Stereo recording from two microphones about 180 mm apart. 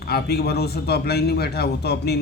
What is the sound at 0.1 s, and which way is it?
A man's voice, 60° left (ahead or behind).